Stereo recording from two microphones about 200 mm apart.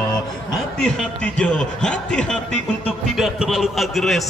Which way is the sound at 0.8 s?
5° left (ahead or behind).